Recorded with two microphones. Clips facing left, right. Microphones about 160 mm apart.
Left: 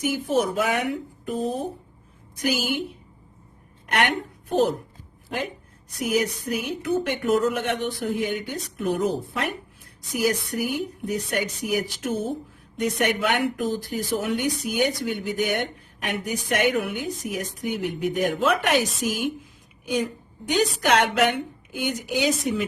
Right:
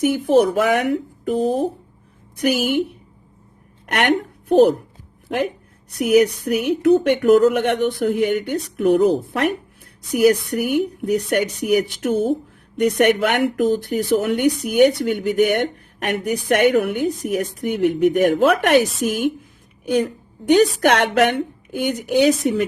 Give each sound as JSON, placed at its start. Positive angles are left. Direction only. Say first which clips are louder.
{"t": 0.0, "sound": "speech", "louder": "right 8 dB", "side_deg": -60}
{"t": 2.4, "sound": "speech", "louder": "right 7 dB", "side_deg": -60}
{"t": 3.9, "sound": "a woman's voice", "louder": "right 5 dB", "side_deg": -65}
{"t": 6.0, "sound": "speech", "louder": "right 9 dB", "side_deg": -65}